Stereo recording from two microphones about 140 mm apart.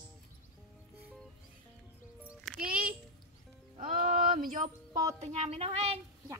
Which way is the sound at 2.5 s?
5° left (ahead or behind).